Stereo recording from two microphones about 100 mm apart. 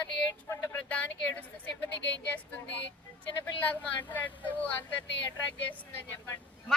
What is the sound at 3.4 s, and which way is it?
Speech, 15° left (ahead or behind).